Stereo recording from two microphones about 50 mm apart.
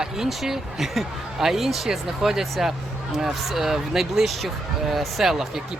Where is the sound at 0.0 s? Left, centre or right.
Centre.